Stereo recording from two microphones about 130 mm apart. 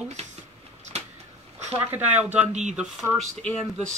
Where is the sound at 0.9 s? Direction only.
55° right (ahead or behind).